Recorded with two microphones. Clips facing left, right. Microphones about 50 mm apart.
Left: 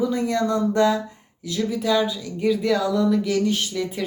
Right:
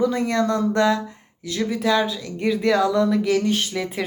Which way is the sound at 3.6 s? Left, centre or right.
Right.